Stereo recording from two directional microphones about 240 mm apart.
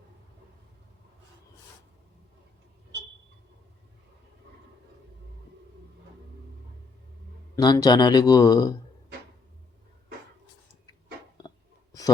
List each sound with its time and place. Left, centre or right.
7.5 s speech: centre